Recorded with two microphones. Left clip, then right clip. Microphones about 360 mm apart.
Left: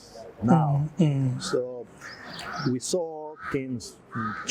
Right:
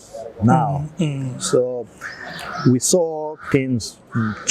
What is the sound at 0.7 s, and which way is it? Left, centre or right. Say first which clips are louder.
Speech: right 3 dB; left.